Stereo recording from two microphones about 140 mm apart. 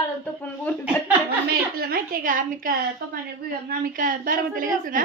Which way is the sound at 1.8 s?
90° right.